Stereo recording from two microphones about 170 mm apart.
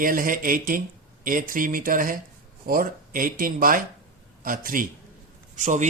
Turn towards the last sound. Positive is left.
turn(degrees=-45)  # may be behind; listen again after turning